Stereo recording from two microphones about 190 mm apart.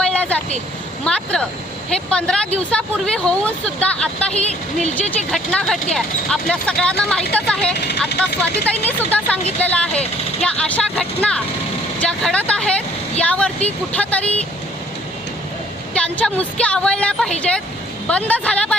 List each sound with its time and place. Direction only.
0.0 s vehicle: 5° left (ahead or behind)
1.0 s speech: 5° left (ahead or behind)
7.8 s speech: 60° left (ahead or behind)
8.6 s speech: 10° left (ahead or behind)
16.0 s speech: 5° left (ahead or behind)